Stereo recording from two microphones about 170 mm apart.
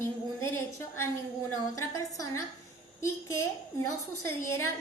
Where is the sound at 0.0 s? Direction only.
15° left (ahead or behind).